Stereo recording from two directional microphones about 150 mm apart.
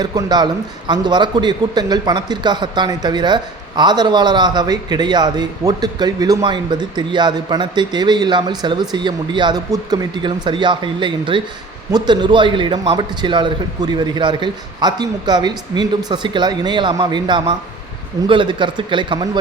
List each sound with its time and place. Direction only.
0.0 s a man's voice: 25° right (ahead or behind)